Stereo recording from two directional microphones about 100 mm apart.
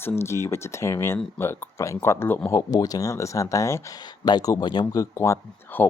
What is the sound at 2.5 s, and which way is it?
Speech, 35° left (ahead or behind).